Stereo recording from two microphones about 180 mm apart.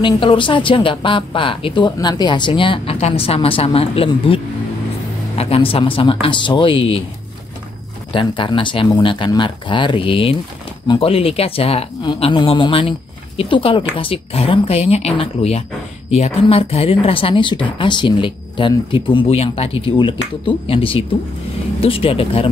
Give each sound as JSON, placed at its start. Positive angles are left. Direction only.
{"t": 0.0, "sound": "speech", "side_deg": 30}
{"t": 5.4, "sound": "speech", "side_deg": 30}
{"t": 8.1, "sound": "speech", "side_deg": 25}